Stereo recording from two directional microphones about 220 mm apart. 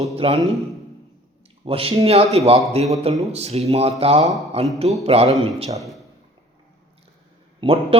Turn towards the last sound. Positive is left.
turn(degrees=-25)  # may be behind; listen again after turning